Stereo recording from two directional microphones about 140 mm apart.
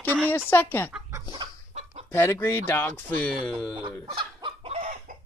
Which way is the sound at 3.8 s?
40° right (ahead or behind).